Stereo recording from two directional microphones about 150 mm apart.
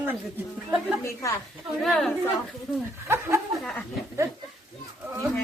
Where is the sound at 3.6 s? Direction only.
5° left (ahead or behind).